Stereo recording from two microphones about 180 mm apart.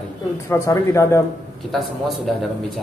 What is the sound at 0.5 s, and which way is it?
Speech, 15° left (ahead or behind).